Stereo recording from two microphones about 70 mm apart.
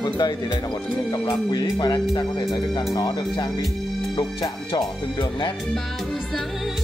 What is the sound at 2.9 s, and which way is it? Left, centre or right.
Speech, left.